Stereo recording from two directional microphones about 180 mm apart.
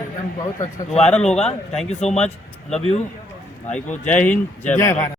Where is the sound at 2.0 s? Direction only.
40° left (ahead or behind).